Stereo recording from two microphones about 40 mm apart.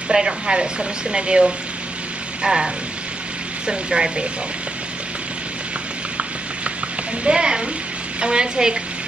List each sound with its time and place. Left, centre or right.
0.1 s speech: centre
7.2 s speech: right